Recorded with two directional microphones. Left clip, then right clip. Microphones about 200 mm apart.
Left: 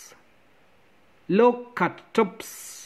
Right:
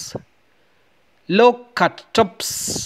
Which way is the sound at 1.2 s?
30° right (ahead or behind).